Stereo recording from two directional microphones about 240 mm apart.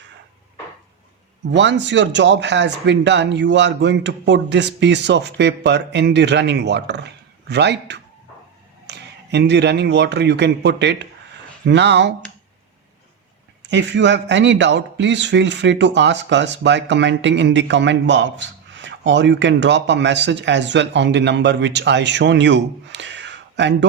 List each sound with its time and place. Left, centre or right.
1.5 s a man's voice: right
13.7 s a man's voice: right